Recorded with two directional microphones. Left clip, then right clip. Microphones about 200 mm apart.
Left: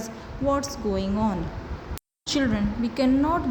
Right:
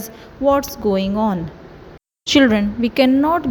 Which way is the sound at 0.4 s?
35° right (ahead or behind).